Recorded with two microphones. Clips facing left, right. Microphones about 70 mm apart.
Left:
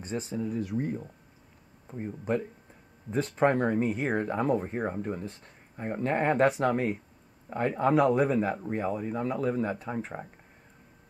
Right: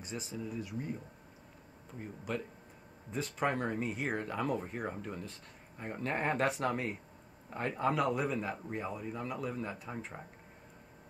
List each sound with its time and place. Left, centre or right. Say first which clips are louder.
0.0 s speech: left 8 dB; left
1.9 s speech: left 9 dB; left
6.4 s speech: left 9 dB; left
7.5 s speech: left 7 dB; left
7.9 s speech: left 12 dB; left
8.7 s speech: left 8 dB; left